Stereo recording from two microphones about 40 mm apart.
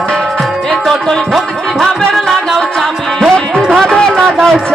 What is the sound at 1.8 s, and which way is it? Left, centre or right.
Music, centre.